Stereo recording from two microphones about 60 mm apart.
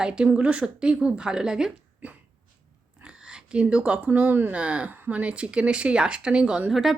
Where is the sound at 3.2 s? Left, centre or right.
Centre; by 4.5 s right.